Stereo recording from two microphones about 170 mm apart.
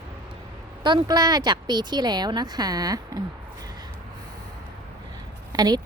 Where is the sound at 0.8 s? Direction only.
25° right (ahead or behind).